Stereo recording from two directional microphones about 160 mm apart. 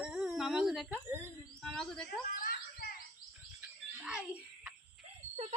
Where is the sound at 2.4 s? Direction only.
70° left (ahead or behind).